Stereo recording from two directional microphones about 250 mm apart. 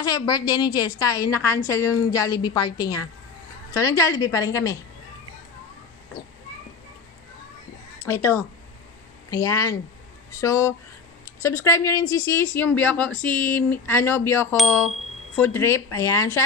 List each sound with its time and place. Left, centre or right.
0.0 s a woman's voice: centre
8.0 s a woman's voice: centre